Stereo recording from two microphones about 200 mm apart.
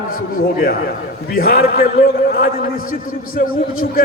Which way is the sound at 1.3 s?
45° left (ahead or behind).